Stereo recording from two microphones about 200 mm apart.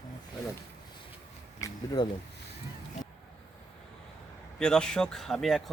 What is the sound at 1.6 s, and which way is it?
Speech, 20° left (ahead or behind).